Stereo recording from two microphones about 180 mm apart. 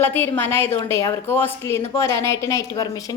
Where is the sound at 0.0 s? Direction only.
10° left (ahead or behind).